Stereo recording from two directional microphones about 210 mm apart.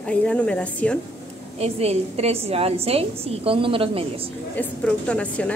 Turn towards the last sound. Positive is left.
turn(degrees=5)  # may be behind; listen again after turning